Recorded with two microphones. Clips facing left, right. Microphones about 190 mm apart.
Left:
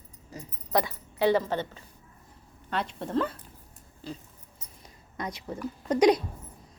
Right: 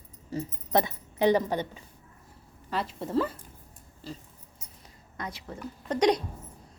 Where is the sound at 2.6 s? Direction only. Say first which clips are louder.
Even; 5° right (ahead or behind).